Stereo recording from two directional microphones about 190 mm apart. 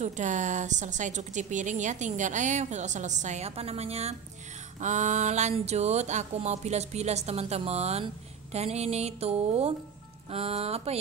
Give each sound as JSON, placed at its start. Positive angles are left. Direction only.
{"t": 0.0, "sound": "a woman's voice", "side_deg": -40}